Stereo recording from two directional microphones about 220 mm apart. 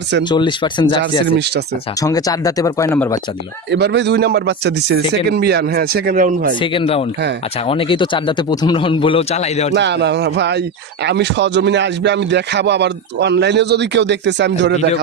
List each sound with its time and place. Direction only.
0.3 s a man's voice: 20° left (ahead or behind)
1.4 s speech: 50° right (ahead or behind)
2.0 s speech: 15° left (ahead or behind)
3.7 s speech: 50° right (ahead or behind)
6.6 s a man's voice: 25° left (ahead or behind)
9.7 s speech: 50° right (ahead or behind)